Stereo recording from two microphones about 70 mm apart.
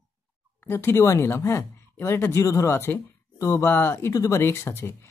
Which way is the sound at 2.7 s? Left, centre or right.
Left.